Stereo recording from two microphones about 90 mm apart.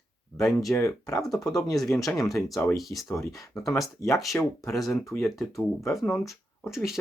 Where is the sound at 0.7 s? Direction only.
35° left (ahead or behind).